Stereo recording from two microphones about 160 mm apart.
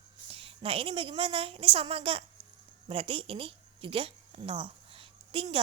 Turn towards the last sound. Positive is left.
turn(degrees=-35)  # may be behind; listen again after turning